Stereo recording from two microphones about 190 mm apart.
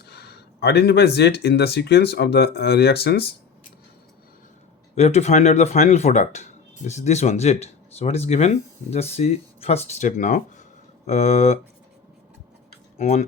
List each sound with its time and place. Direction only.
0.0 s speech: 60° left (ahead or behind)
4.9 s speech: 35° left (ahead or behind)
13.0 s speech: 35° left (ahead or behind)